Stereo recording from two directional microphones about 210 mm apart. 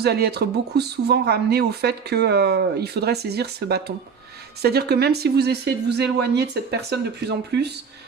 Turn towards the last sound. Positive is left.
turn(degrees=-50)  # may be behind; listen again after turning